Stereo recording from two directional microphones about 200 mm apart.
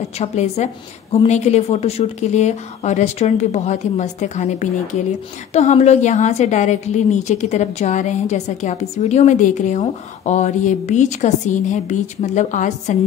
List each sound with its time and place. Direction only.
0.2 s a woman's voice: 35° left (ahead or behind)